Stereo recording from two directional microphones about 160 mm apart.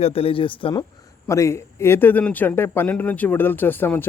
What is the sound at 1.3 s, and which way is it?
A man's voice, 20° left (ahead or behind).